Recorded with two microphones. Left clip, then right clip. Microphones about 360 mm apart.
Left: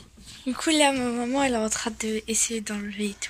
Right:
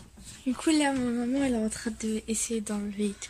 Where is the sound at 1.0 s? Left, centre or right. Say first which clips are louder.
Left 4 dB; left.